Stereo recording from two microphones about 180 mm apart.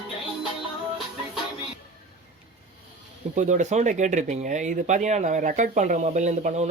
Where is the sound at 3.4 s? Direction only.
40° right (ahead or behind).